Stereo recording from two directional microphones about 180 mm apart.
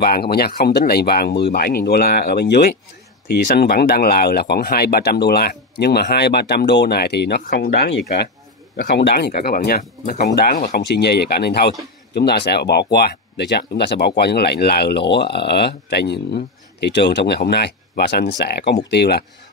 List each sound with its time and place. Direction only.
0.0 s speech: 60° left (ahead or behind)